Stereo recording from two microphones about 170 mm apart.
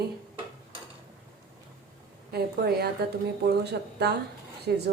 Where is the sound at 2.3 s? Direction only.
65° right (ahead or behind).